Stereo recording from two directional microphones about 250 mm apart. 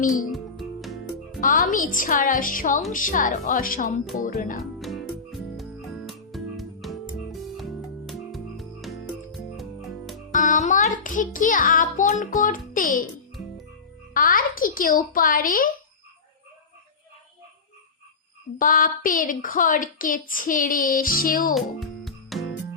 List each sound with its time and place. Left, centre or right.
0.0 s speech: left
0.3 s music: centre
1.4 s speech: left
4.8 s music: centre
10.3 s a child's voice: left
14.1 s speech: left
18.6 s speech: left
21.5 s music: centre